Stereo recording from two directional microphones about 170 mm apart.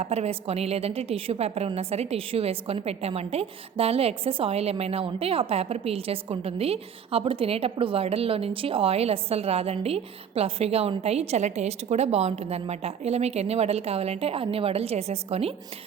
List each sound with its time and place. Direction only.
0.0 s a woman's voice: 40° right (ahead or behind)